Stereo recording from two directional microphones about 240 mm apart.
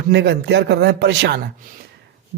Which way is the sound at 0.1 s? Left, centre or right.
Right.